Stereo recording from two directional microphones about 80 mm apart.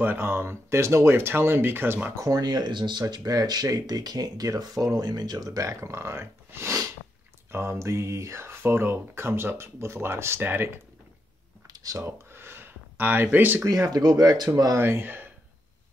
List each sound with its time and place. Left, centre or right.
0.0 s speech: right
2.1 s speech: right
11.6 s a sound: right
12.3 s a sound: right
13.7 s speech: right
14.5 s speech: right
14.8 s speech: right